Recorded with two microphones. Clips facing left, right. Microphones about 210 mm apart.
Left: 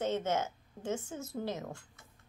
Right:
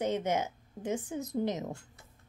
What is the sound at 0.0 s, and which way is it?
Speech, 15° right (ahead or behind).